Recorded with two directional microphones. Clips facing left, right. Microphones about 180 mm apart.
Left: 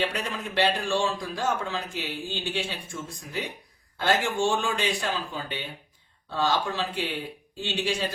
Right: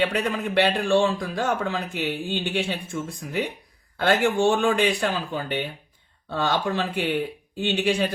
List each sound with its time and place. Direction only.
0.1 s a man's voice: 60° right (ahead or behind)